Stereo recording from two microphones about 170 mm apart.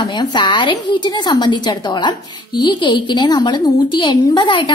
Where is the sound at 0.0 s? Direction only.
25° left (ahead or behind).